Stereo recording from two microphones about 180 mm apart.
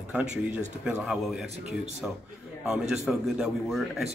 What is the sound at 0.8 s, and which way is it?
A man's voice, 5° right (ahead or behind).